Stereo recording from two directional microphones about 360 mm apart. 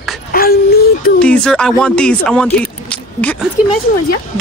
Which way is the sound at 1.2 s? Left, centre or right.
Centre.